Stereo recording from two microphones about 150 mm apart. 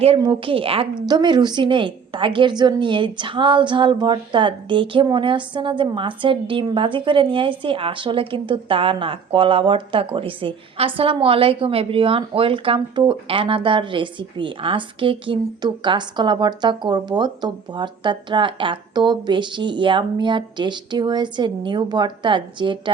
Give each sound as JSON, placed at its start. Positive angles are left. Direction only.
{"t": 0.2, "sound": "a woman's voice", "side_deg": -35}